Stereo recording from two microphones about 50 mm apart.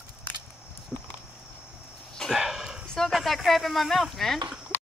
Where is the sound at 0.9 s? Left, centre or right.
Centre.